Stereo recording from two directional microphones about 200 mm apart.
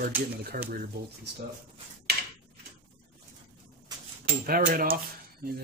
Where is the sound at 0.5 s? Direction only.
45° right (ahead or behind).